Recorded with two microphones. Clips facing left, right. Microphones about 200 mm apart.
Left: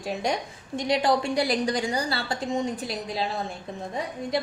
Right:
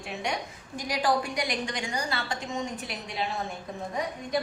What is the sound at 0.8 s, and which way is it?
A woman's voice, 25° left (ahead or behind).